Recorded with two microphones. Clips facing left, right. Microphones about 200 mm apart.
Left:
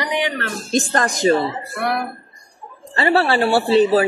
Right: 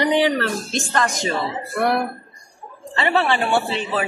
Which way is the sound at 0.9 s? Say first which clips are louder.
Left 5 dB; 35° left (ahead or behind).